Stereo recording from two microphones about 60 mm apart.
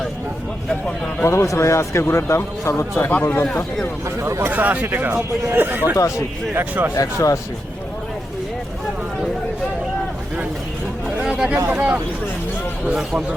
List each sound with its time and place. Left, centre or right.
1.2 s a man's voice: left
3.1 s a man's voice: left
3.4 s speech: centre
4.2 s speech: right
4.4 s speech: right
6.0 s speech: left
6.5 s speech: right
6.9 s speech: left
11.2 s chatter: centre
11.7 s speech: right